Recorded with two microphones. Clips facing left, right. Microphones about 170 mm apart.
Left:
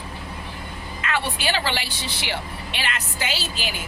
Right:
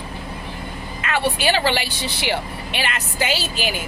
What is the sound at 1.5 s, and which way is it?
Speech, 65° right (ahead or behind).